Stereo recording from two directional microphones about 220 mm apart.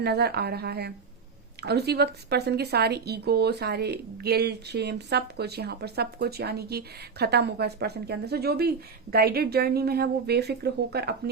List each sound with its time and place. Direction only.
0.0 s speech: 45° right (ahead or behind)